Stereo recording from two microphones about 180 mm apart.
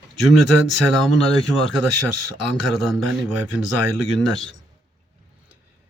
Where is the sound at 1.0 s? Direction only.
Centre (ahead or behind).